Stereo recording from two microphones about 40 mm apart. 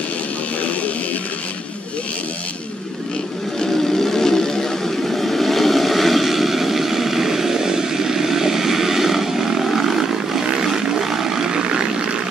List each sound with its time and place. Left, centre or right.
3.6 s vehicle: centre